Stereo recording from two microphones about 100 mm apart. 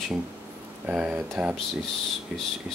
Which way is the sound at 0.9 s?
10° right (ahead or behind).